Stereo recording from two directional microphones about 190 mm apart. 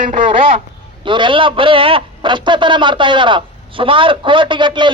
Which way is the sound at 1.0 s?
25° right (ahead or behind).